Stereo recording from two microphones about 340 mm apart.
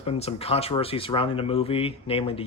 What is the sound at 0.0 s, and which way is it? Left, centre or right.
Speech, centre.